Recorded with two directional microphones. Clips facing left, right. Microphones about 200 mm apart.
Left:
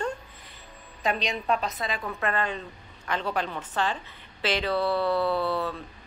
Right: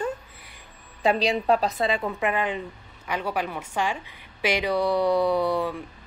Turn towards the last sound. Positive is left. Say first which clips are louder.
# right 4 dB
turn(degrees=-15)  # may be behind; listen again after turning